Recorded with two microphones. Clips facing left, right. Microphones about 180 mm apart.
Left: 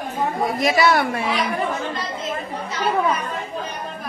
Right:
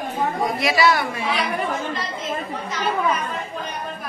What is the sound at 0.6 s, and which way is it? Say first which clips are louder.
Speech: left 2 dB; 50° left (ahead or behind).